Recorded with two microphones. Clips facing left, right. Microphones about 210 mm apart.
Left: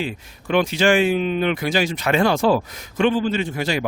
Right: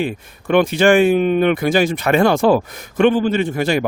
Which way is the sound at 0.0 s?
55° right (ahead or behind).